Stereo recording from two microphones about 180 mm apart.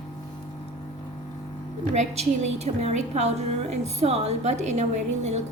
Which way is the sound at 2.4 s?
35° right (ahead or behind).